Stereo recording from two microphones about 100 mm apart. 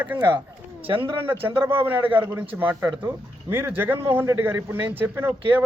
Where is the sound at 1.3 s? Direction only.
20° right (ahead or behind).